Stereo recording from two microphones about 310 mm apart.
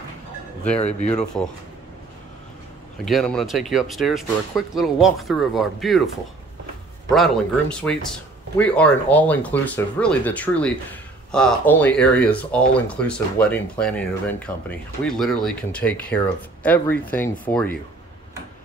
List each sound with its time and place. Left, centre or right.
0.7 s speech: left
1.1 s speech: centre
3.1 s speech: centre
7.8 s speech: centre